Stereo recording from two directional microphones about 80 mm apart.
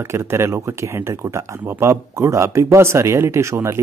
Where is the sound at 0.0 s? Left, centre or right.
Right.